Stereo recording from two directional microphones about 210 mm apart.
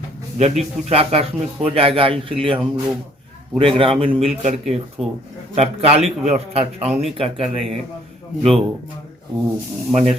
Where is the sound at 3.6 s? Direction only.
25° right (ahead or behind).